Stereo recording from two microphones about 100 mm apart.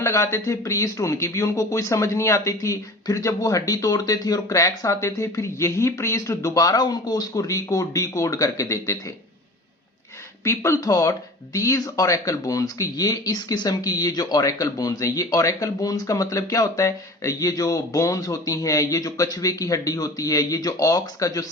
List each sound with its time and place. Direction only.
0.0 s speech: 30° left (ahead or behind)
10.4 s speech: 30° left (ahead or behind)